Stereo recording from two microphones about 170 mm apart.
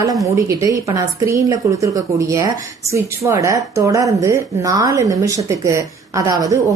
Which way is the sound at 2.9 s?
20° right (ahead or behind).